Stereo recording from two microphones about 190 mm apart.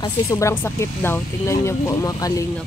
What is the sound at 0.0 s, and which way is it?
Speech, 15° left (ahead or behind).